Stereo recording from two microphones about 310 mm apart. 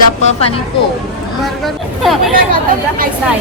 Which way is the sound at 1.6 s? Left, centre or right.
Centre.